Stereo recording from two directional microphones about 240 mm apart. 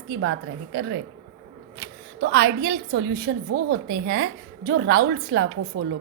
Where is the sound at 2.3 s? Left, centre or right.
Right.